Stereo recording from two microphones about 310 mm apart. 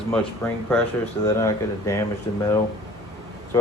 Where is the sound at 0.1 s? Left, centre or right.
Centre.